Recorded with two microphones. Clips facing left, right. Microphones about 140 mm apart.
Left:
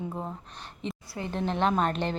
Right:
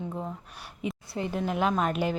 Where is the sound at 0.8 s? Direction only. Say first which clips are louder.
Right 3 dB; 10° right (ahead or behind).